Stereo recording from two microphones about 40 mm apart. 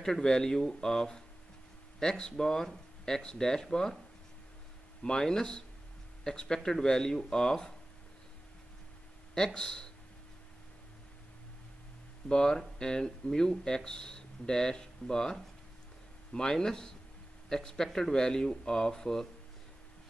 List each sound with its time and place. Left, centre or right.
0.0 s speech: centre
5.0 s speech: centre
9.3 s speech: centre
12.3 s speech: centre